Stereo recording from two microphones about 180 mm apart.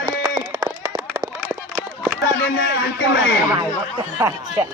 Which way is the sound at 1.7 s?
10° right (ahead or behind).